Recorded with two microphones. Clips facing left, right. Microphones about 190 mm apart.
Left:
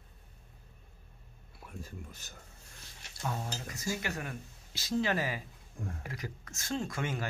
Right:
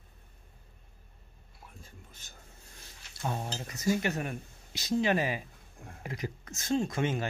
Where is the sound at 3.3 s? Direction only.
20° right (ahead or behind).